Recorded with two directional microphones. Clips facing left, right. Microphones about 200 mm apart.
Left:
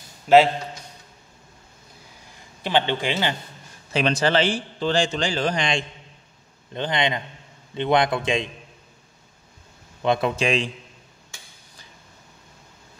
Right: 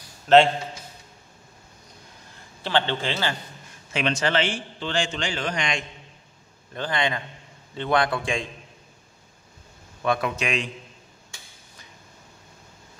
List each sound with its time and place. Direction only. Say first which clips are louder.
0.3 s a man's voice: left 1 dB; 10° left (ahead or behind)
2.6 s a man's voice: left 2 dB; 15° left (ahead or behind)
3.9 s a man's voice: left 3 dB; 35° left (ahead or behind)
6.7 s a man's voice: left 2 dB; 20° left (ahead or behind)
10.0 s a man's voice: left 4 dB; 25° left (ahead or behind)